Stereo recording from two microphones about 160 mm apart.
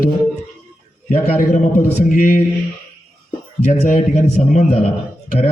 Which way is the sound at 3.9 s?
50° left (ahead or behind).